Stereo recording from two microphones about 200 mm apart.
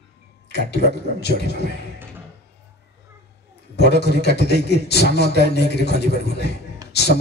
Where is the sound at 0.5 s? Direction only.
55° left (ahead or behind).